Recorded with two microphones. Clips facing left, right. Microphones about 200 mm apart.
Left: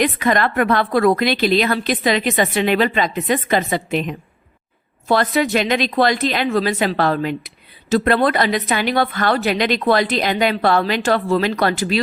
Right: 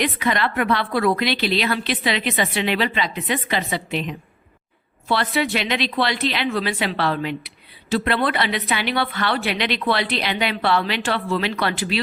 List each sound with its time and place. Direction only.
0.0 s a woman's voice: 45° left (ahead or behind)